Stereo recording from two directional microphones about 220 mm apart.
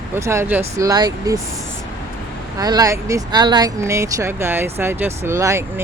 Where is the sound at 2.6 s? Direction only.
15° right (ahead or behind).